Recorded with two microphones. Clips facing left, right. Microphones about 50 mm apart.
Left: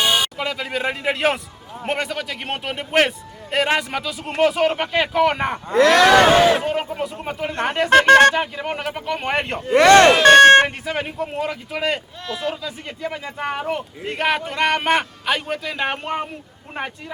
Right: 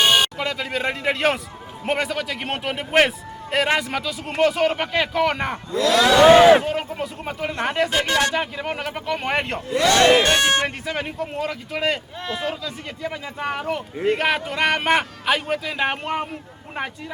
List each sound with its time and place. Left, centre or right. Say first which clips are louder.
0.0 s a sound: right 2 dB; right
0.3 s a man's voice: even; centre
5.7 s a sound: left 4 dB; left
6.3 s speech: right 4 dB; right
6.6 s speech: left 2 dB; centre
7.9 s a sound: left 10 dB; left
8.4 s a man's voice: left 2 dB; centre
9.6 s a sound: left 7 dB; left
10.2 s speech: left 10 dB; left
10.8 s a man's voice: left 2 dB; centre
12.3 s speech: left 1 dB; centre
12.6 s a man's voice: left 1 dB; centre